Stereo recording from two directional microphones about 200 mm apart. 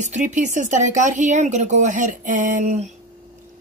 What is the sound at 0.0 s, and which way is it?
Speech, 35° right (ahead or behind).